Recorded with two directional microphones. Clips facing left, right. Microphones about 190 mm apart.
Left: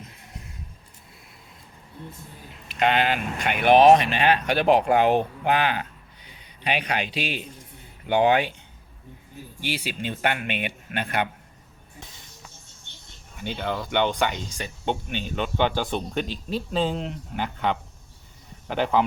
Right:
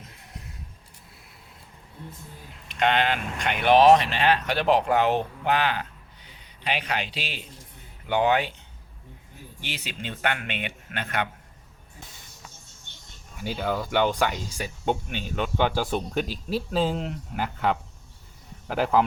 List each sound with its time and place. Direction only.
2.6 s a man's voice: 10° left (ahead or behind)
9.6 s speech: 10° left (ahead or behind)
13.3 s speech: 5° right (ahead or behind)